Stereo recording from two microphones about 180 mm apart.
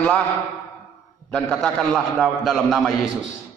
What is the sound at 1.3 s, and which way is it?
A man's voice, 5° left (ahead or behind).